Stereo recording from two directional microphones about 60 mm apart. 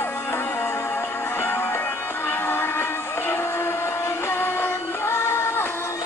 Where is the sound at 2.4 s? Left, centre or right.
Left.